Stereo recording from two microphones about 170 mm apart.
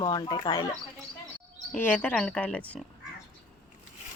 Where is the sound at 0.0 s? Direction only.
25° left (ahead or behind).